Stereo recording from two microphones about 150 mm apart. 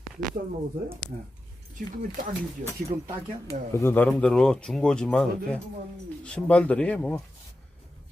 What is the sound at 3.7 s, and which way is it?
Speech, 15° left (ahead or behind).